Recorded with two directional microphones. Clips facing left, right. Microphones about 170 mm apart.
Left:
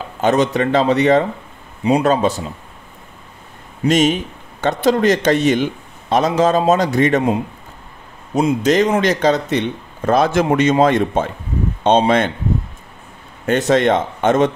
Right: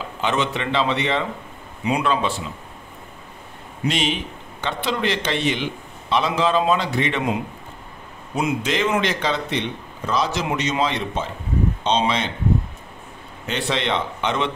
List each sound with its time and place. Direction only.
0.2 s a man's voice: 40° left (ahead or behind)
3.8 s a man's voice: 45° left (ahead or behind)
8.4 s a man's voice: 40° left (ahead or behind)
13.5 s a man's voice: 45° left (ahead or behind)